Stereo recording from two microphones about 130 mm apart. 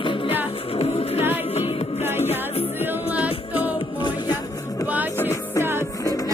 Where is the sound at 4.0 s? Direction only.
35° left (ahead or behind).